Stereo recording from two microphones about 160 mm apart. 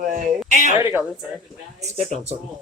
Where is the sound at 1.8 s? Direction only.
40° right (ahead or behind).